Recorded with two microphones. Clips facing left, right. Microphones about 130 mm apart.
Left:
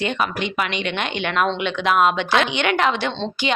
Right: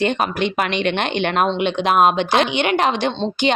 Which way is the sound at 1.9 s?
35° right (ahead or behind).